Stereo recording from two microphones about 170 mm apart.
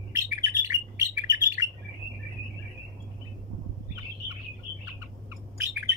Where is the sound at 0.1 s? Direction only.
20° right (ahead or behind).